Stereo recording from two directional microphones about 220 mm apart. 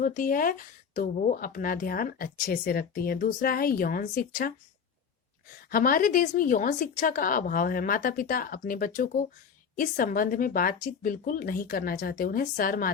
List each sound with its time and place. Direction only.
0.0 s speech: 40° left (ahead or behind)
5.7 s speech: 40° left (ahead or behind)